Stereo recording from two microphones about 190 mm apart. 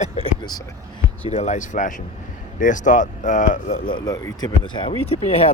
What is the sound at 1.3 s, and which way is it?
Speech, 35° left (ahead or behind).